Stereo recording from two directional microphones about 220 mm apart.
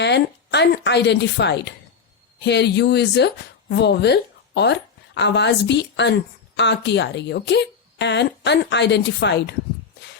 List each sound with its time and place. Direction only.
0.0 s speech: 50° left (ahead or behind)